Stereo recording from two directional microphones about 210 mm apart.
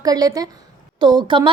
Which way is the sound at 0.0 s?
15° right (ahead or behind).